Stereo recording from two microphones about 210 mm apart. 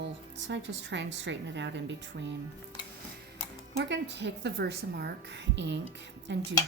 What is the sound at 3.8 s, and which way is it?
A woman's voice, 55° right (ahead or behind).